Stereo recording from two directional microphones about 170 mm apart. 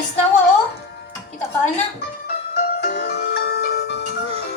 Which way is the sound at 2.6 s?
80° left.